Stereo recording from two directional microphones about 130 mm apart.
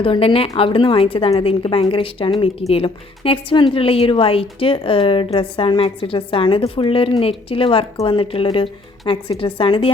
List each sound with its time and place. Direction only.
0.0 s speech: 45° left (ahead or behind)